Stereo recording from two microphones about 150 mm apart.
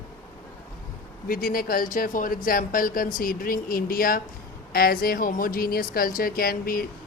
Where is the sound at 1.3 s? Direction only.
70° left (ahead or behind).